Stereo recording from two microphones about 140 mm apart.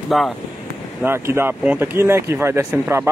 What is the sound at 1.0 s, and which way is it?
Speech, 20° right (ahead or behind).